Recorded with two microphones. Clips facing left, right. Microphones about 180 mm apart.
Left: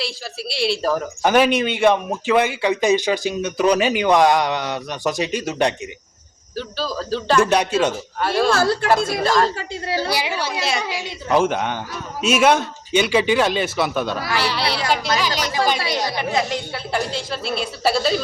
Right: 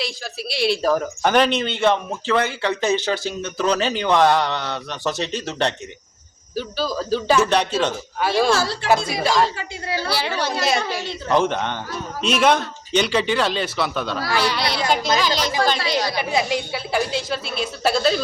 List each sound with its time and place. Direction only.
0.5 s speech: centre (ahead or behind)
6.6 s a woman's voice: centre (ahead or behind)
7.5 s a woman's voice: 10° left (ahead or behind)
8.5 s speech: 50° left (ahead or behind)
8.9 s a woman's voice: centre (ahead or behind)
9.6 s a woman's voice: 30° left (ahead or behind)
10.1 s a woman's voice: 10° left (ahead or behind)
15.8 s a woman's voice: 20° left (ahead or behind)
16.3 s a woman's voice: 10° right (ahead or behind)